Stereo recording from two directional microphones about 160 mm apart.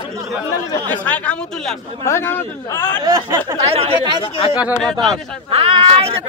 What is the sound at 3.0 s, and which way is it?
Speech, 25° right (ahead or behind).